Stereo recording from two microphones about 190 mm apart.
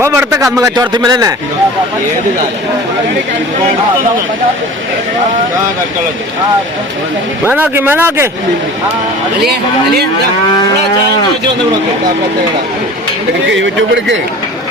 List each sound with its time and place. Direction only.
0.0 s a man's voice: 15° right (ahead or behind)
7.4 s a man's voice: 10° right (ahead or behind)
13.5 s speech: 75° right (ahead or behind)